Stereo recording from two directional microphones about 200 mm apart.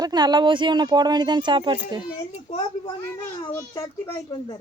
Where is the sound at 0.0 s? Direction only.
20° right (ahead or behind).